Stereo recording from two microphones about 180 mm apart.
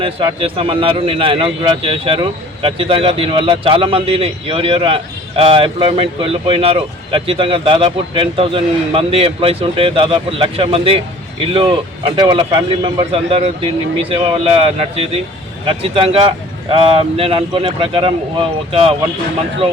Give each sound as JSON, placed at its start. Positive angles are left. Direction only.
{"t": 0.0, "sound": "speech", "side_deg": -30}